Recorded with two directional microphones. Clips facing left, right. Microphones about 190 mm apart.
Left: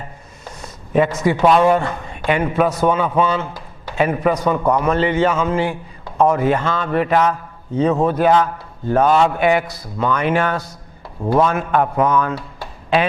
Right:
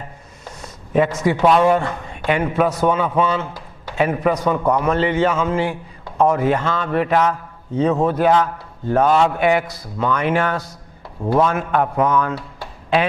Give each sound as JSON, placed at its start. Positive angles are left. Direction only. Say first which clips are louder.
{"t": 0.6, "sound": "a man's voice", "louder": "left 1 dB", "side_deg": 20}